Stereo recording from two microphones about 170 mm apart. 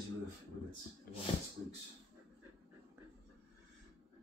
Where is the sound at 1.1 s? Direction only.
60° left (ahead or behind).